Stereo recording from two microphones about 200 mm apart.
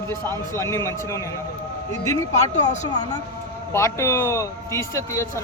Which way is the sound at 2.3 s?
35° left (ahead or behind).